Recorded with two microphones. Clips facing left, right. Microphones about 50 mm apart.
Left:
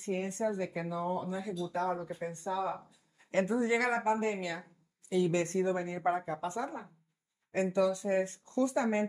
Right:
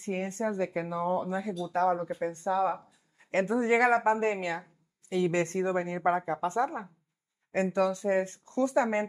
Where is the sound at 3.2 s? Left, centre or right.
Right.